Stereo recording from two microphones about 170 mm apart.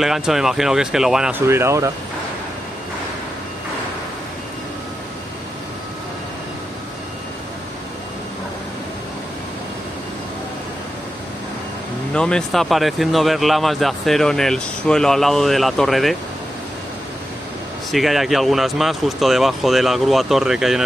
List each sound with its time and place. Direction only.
0.0 s speech: centre (ahead or behind)
1.5 s speech: 15° right (ahead or behind)
12.1 s speech: 5° left (ahead or behind)
17.9 s speech: centre (ahead or behind)